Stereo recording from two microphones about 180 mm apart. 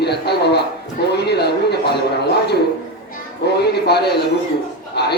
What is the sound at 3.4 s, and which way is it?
Speech, 65° left (ahead or behind).